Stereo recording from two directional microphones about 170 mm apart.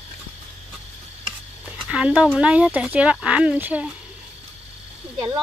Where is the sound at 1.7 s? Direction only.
5° right (ahead or behind).